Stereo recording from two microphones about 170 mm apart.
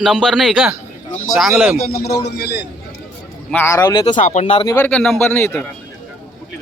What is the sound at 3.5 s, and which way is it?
Speech, 15° left (ahead or behind).